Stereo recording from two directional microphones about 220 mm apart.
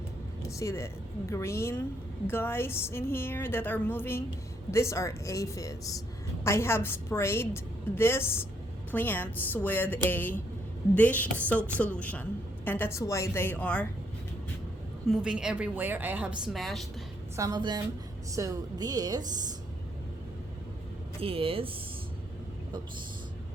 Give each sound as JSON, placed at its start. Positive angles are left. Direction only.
{"t": 0.6, "sound": "a woman's voice", "side_deg": 10}
{"t": 15.1, "sound": "a woman's voice", "side_deg": -5}
{"t": 17.3, "sound": "a woman's voice", "side_deg": -15}
{"t": 21.2, "sound": "speech", "side_deg": -25}